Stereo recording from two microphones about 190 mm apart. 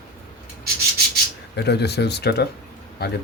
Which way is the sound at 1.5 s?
60° left (ahead or behind).